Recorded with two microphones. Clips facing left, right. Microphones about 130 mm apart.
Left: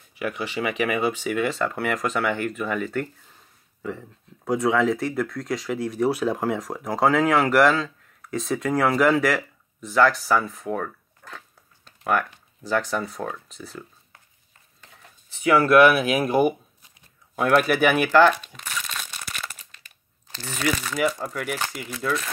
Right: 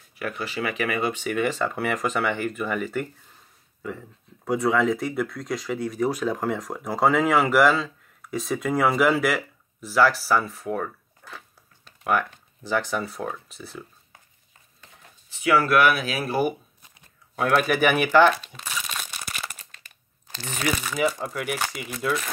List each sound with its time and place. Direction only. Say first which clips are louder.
0.2 s speech: left 2 dB; 10° left (ahead or behind)
15.6 s speech: left 5 dB; 25° left (ahead or behind)
17.6 s speech: left 1 dB; centre (ahead or behind)
18.7 s a sound: even; 15° right (ahead or behind)
20.2 s speech: left 1 dB; 15° right (ahead or behind)